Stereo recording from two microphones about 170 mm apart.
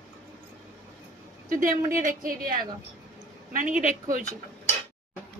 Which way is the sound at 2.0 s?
55° right (ahead or behind).